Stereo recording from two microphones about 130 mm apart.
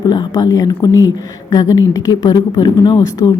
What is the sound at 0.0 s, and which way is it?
Speech, 35° left (ahead or behind).